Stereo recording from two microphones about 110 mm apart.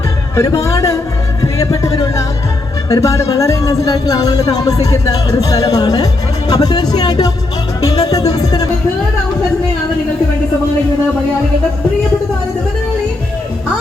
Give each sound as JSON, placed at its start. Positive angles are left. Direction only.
{"t": 0.3, "sound": "speech", "side_deg": 25}
{"t": 2.9, "sound": "speech", "side_deg": 30}
{"t": 7.8, "sound": "music", "side_deg": 35}